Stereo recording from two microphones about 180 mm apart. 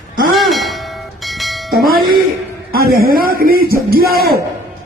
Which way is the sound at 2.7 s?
55° right (ahead or behind).